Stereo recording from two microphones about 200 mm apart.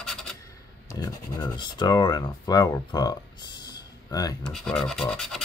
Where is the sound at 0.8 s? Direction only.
20° left (ahead or behind).